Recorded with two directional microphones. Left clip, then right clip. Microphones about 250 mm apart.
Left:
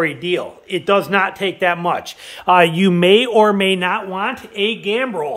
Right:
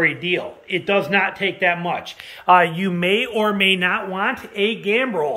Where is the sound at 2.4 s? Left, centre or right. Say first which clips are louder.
Left 2 dB; left.